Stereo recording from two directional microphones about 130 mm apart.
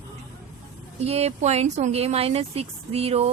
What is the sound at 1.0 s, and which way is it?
Speech, 55° right (ahead or behind).